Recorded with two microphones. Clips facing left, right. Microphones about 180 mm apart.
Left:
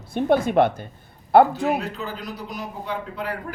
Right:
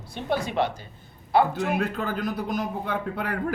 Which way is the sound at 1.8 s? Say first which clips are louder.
Right 4 dB; 50° right (ahead or behind).